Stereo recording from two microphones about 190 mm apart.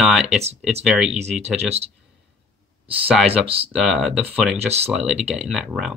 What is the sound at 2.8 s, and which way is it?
Speech, 30° right (ahead or behind).